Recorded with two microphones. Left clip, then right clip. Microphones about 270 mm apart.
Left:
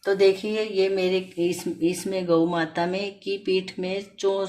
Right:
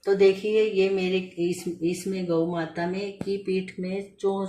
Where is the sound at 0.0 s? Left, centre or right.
Left.